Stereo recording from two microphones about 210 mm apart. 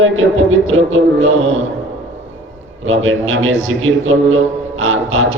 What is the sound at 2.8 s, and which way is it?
A man's voice, 70° right (ahead or behind).